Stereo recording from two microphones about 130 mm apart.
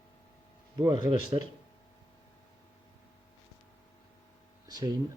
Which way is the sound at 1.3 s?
35° right (ahead or behind).